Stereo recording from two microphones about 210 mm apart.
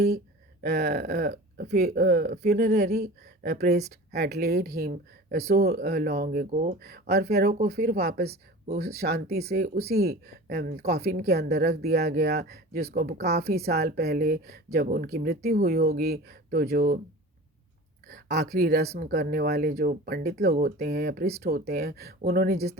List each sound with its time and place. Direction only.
0.6 s speech: 50° right (ahead or behind)
8.3 s speech: 35° right (ahead or behind)
8.8 s speech: 50° right (ahead or behind)
18.1 s speech: 50° right (ahead or behind)